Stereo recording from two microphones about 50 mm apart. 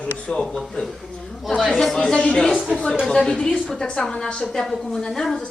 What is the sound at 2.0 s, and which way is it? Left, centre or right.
Speech, left.